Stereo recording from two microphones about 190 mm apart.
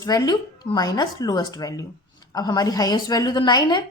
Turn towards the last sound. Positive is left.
turn(degrees=20)  # may be behind; listen again after turning